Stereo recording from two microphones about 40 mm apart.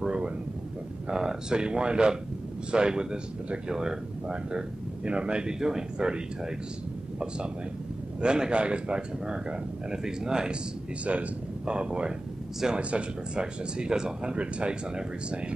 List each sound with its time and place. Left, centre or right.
0.0 s a sound: right
1.0 s speech: centre
11.1 s speech: right